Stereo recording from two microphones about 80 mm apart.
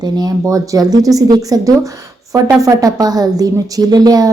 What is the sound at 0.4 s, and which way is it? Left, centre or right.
A woman's voice, right.